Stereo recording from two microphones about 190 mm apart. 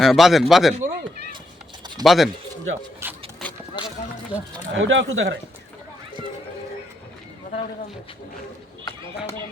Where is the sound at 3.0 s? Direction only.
15° right (ahead or behind).